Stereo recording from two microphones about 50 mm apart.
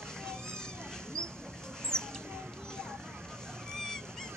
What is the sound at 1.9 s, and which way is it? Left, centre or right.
Mouse, centre.